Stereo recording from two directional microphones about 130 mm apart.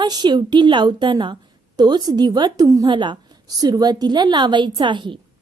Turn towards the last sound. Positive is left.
turn(degrees=-40)  # may be behind; listen again after turning